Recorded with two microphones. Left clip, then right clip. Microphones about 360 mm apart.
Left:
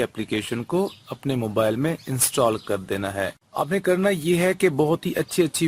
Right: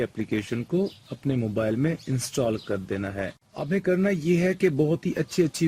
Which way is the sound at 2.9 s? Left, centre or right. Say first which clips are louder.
Left 5 dB; left.